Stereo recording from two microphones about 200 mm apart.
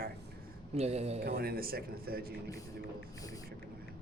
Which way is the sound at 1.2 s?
50° right (ahead or behind).